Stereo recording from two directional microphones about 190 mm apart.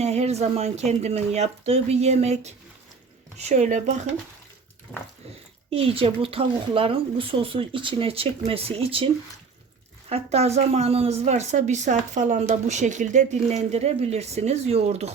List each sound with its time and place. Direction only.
0.0 s speech: 35° right (ahead or behind)
5.7 s a woman's voice: 30° right (ahead or behind)
10.1 s speech: 35° right (ahead or behind)